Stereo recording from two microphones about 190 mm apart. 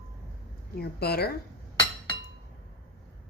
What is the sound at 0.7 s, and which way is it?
Speech, 55° left (ahead or behind).